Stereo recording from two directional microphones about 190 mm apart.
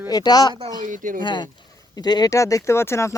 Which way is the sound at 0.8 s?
45° right (ahead or behind).